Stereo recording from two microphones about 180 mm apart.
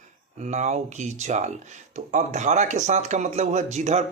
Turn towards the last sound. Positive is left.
turn(degrees=-40)  # may be behind; listen again after turning